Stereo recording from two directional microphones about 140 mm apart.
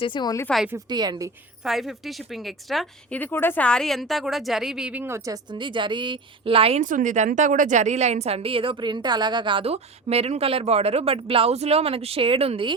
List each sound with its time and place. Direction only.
0.0 s speech: 35° left (ahead or behind)
0.9 s a woman's voice: 30° right (ahead or behind)
1.6 s a woman's voice: centre (ahead or behind)
3.2 s a woman's voice: 15° left (ahead or behind); by 6.8 s 45° right (ahead or behind)
6.8 s a woman's voice: 65° right (ahead or behind); by 12.7 s 40° right (ahead or behind)